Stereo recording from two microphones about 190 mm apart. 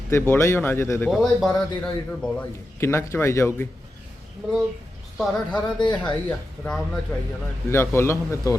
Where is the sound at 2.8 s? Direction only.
15° left (ahead or behind).